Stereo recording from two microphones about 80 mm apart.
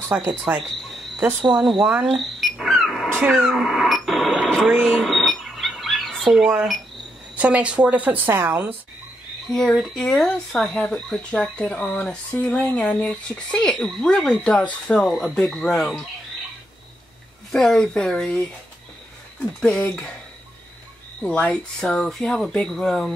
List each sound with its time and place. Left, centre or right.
0.1 s speech: centre
0.7 s cricket: centre
1.6 s speech: centre
3.1 s dog: right
3.3 s radio: centre
4.8 s bird: centre
7.3 s a woman's voice: centre
9.5 s speech: centre
15.0 s speech: centre
17.5 s speech: centre
19.6 s speech: centre
21.2 s speech: centre
21.8 s speech: centre